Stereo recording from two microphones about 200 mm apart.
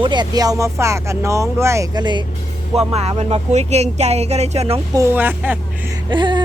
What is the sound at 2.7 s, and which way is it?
Speech, 30° right (ahead or behind).